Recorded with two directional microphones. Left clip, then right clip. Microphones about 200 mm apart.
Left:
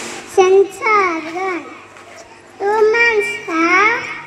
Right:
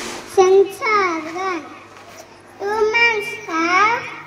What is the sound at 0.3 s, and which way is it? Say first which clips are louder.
Child singing: left 2 dB; 40° right (ahead or behind).